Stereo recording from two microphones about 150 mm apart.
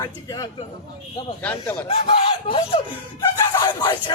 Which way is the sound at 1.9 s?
35° left (ahead or behind).